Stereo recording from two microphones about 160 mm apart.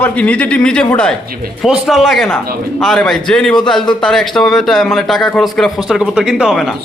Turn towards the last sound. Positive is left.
turn(degrees=0)  # may be behind; listen again after turning